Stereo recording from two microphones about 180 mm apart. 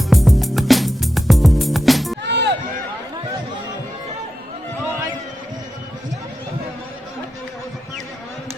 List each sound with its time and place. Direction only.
0.1 s music: centre (ahead or behind)
2.2 s music: 70° right (ahead or behind)